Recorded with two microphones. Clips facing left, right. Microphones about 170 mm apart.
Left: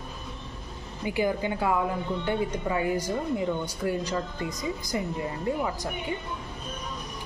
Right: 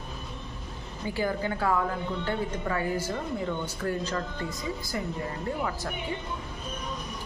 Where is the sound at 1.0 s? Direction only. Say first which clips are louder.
Left 3 dB; 15° left (ahead or behind).